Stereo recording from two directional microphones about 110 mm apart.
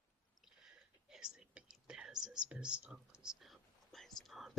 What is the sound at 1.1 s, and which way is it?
Whispering, 5° right (ahead or behind).